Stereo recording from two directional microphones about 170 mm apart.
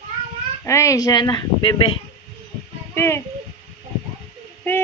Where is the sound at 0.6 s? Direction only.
15° left (ahead or behind).